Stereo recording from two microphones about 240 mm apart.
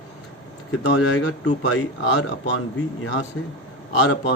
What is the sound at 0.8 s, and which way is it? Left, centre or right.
Speech, left.